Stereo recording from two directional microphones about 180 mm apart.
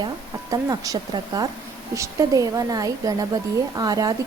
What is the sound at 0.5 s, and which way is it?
Speech, 20° right (ahead or behind).